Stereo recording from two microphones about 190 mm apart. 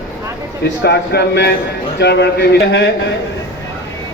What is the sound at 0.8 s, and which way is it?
Speech, 60° left (ahead or behind).